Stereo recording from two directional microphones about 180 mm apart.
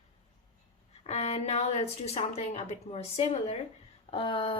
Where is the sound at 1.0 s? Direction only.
35° left (ahead or behind).